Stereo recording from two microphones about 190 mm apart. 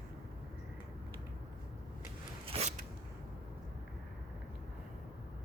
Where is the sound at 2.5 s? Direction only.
35° right (ahead or behind).